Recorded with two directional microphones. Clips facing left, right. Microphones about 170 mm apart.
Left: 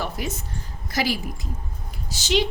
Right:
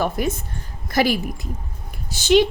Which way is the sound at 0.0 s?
50° right (ahead or behind).